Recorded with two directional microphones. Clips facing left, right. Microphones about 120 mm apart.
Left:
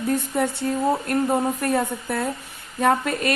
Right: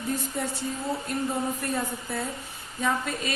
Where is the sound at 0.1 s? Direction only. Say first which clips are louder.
Left 7 dB; 60° left (ahead or behind).